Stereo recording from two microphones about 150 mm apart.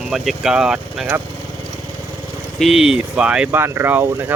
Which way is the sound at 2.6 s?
5° right (ahead or behind).